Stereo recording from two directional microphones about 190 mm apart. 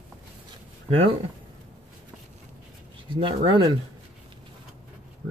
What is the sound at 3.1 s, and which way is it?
Speech, 25° right (ahead or behind).